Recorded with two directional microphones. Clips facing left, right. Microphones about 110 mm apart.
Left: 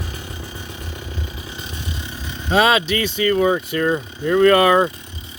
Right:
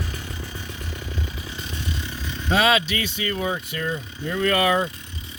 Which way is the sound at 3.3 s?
50° left (ahead or behind).